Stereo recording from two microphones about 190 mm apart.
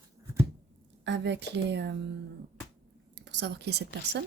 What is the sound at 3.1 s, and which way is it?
Speech, 65° right (ahead or behind).